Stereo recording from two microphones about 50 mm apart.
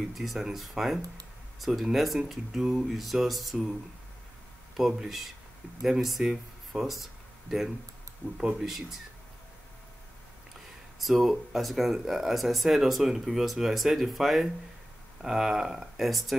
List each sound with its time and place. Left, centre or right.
0.0 s speech: centre
4.7 s speech: centre
8.2 s speech: left
8.5 s speech: centre
11.0 s speech: centre